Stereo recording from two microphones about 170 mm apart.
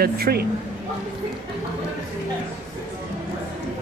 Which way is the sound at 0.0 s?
65° right (ahead or behind).